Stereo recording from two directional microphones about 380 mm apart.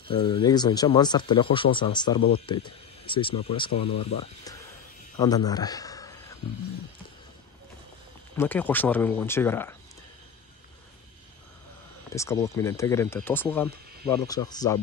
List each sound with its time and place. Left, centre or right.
0.1 s speech: centre
5.1 s a sound: centre
8.4 s speech: centre
12.1 s speech: centre